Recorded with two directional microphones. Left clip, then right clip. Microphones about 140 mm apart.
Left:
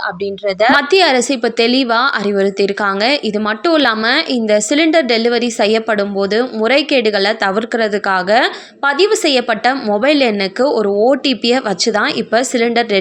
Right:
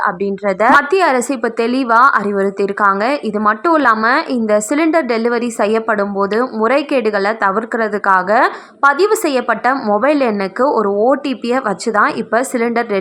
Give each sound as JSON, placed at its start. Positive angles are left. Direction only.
{"t": 0.6, "sound": "a woman's voice", "side_deg": 20}
{"t": 9.5, "sound": "a woman's voice", "side_deg": 15}